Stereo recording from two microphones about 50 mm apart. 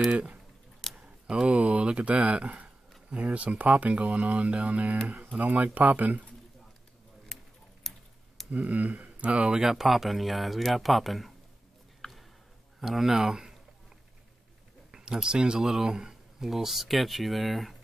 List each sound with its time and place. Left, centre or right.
0.1 s speech: right
0.8 s a sound: centre
1.3 s speech: right
7.3 s tick-tock: centre
8.5 s speech: right
9.6 s speech: centre
12.0 s a sound: centre
12.8 s speech: centre
14.9 s a sound: centre
15.2 s speech: centre